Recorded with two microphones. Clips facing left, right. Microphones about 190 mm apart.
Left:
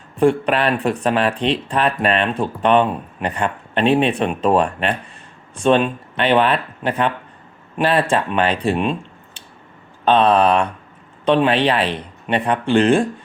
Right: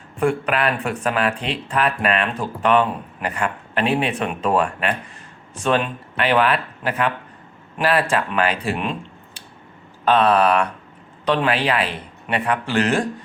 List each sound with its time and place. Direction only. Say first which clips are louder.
0.2 s speech: left 4 dB; 30° left (ahead or behind)
10.1 s speech: left 2 dB; 25° left (ahead or behind)